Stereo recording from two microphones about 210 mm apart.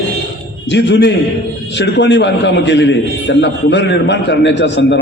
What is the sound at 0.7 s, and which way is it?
A man's voice, 55° left (ahead or behind).